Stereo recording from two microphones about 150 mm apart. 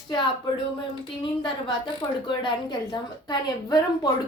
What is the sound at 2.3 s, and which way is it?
A woman's voice, 30° left (ahead or behind).